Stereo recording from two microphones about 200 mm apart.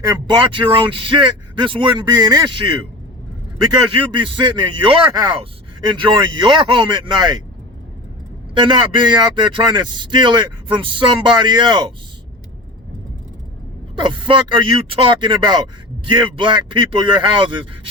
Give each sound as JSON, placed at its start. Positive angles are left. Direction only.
{"t": 0.3, "sound": "speech", "side_deg": -25}
{"t": 4.0, "sound": "speech", "side_deg": -25}
{"t": 8.5, "sound": "speech", "side_deg": -25}
{"t": 14.0, "sound": "speech", "side_deg": -25}